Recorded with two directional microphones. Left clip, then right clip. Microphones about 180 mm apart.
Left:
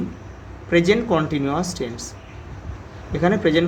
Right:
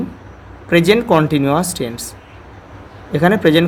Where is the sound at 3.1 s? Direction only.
45° right (ahead or behind).